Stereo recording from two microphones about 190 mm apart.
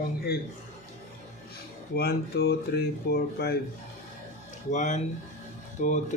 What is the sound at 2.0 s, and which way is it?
Speech, 55° left (ahead or behind).